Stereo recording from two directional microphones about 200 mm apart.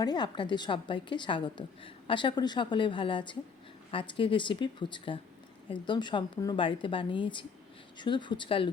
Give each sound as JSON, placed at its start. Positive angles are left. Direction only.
{"t": 0.0, "sound": "a woman's voice", "side_deg": 20}